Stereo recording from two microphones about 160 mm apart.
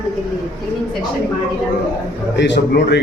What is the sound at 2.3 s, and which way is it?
Speech, 90° left.